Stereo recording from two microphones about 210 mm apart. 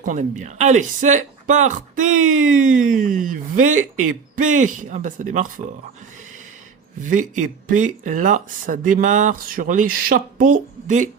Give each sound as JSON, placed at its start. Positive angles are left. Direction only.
{"t": 0.0, "sound": "speech", "side_deg": -35}
{"t": 7.0, "sound": "speech", "side_deg": -35}